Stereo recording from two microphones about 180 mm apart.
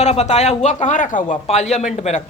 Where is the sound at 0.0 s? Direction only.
35° left (ahead or behind).